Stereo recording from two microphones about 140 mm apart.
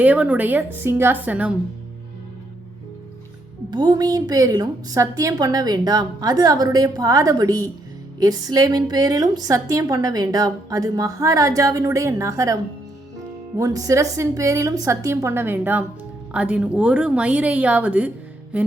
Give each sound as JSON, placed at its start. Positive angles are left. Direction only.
{"t": 0.0, "sound": "a woman's voice", "side_deg": -10}
{"t": 3.7, "sound": "a woman's voice", "side_deg": -30}
{"t": 13.6, "sound": "a woman's voice", "side_deg": -25}